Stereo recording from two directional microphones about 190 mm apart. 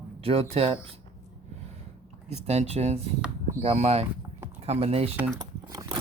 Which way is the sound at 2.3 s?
35° right (ahead or behind).